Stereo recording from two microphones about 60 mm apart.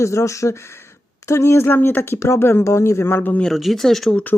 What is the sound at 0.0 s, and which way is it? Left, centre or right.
Speech, left.